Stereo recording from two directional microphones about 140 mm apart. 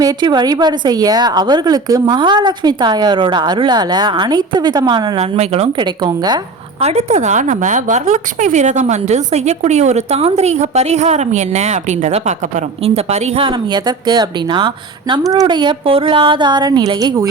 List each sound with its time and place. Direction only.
0.0 s a woman's voice: 30° right (ahead or behind)
5.2 s a woman's voice: 50° right (ahead or behind)
5.7 s a woman's voice: 30° right (ahead or behind)
6.8 s a woman's voice: 55° right (ahead or behind); by 17.2 s 30° right (ahead or behind)